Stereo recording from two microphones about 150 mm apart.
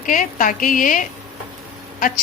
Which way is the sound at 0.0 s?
60° left (ahead or behind).